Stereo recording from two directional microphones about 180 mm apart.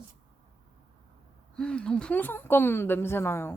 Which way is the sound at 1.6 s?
5° left (ahead or behind).